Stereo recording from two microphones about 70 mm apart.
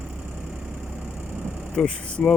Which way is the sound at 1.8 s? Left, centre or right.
Centre.